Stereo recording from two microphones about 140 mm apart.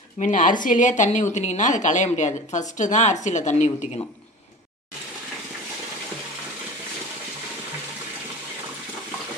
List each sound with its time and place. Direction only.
0.2 s a woman's voice: 65° left (ahead or behind)